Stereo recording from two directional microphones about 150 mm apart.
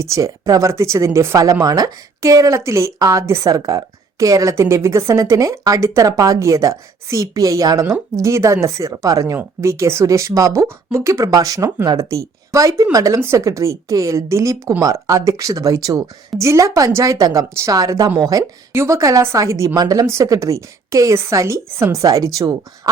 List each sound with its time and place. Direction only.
0.0 s speech: 20° right (ahead or behind)